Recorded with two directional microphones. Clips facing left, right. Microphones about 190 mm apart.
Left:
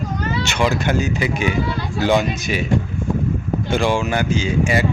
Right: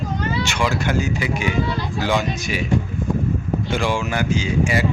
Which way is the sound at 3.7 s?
25° left (ahead or behind).